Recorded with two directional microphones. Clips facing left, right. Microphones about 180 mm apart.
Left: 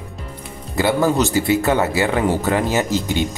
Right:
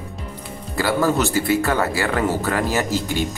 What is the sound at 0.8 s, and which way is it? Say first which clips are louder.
Speech: left 2 dB; 20° left (ahead or behind).